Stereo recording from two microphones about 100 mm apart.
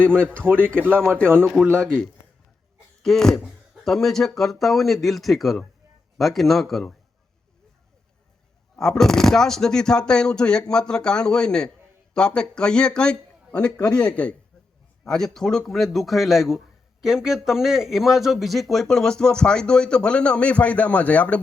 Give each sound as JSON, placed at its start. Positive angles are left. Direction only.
{"t": 0.4, "sound": "speech", "side_deg": -20}
{"t": 1.8, "sound": "a man's voice", "side_deg": 10}
{"t": 8.7, "sound": "a man's voice", "side_deg": 5}